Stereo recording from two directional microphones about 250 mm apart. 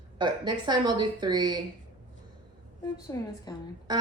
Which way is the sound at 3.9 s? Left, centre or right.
Centre.